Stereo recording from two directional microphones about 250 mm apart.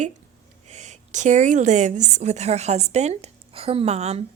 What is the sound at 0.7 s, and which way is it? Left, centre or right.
A woman's voice, right.